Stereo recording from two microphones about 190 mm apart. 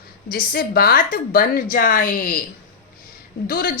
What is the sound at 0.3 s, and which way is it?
A woman's voice, 50° left (ahead or behind).